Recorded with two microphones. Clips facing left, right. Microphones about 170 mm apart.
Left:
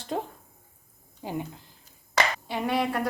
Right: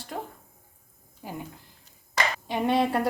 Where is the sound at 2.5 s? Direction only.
25° right (ahead or behind).